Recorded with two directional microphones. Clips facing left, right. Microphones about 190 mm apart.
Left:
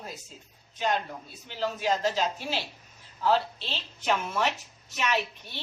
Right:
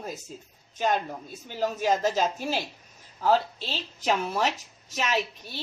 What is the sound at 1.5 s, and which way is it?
A woman's voice, 45° right (ahead or behind).